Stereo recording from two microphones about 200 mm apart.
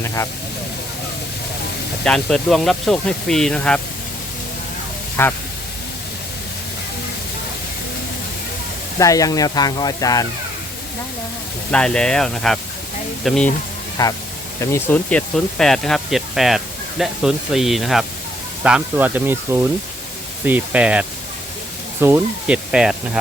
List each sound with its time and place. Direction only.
0.0 s speech: 15° left (ahead or behind)
2.0 s speech: centre (ahead or behind)
5.2 s speech: 10° left (ahead or behind)
9.0 s speech: 15° left (ahead or behind)
11.7 s speech: 5° left (ahead or behind)
14.0 s speech: 20° left (ahead or behind); by 23.0 s 5° right (ahead or behind)